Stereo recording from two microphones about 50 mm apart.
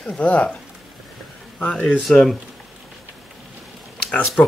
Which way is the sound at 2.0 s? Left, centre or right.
Centre.